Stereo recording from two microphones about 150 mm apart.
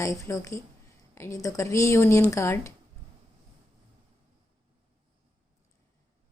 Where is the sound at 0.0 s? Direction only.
20° left (ahead or behind).